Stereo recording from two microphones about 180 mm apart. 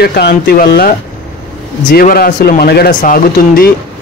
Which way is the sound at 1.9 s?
55° left (ahead or behind).